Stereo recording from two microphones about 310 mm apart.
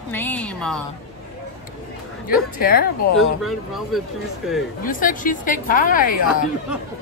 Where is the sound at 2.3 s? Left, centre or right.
Left.